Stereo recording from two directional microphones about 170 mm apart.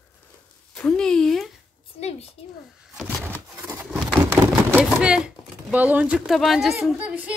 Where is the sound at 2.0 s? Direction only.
40° left (ahead or behind).